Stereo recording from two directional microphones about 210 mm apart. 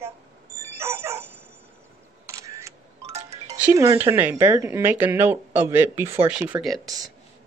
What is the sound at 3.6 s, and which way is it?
Speech, 15° right (ahead or behind).